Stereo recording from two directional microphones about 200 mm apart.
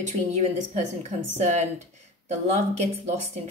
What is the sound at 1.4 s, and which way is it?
Speech, 35° right (ahead or behind).